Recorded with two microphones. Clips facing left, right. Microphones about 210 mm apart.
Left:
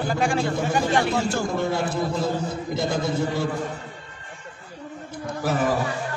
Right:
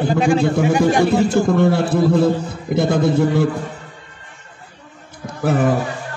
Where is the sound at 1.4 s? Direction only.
60° right (ahead or behind).